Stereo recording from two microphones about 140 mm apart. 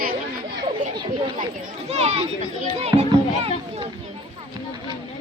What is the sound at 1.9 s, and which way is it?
Speech, 50° right (ahead or behind).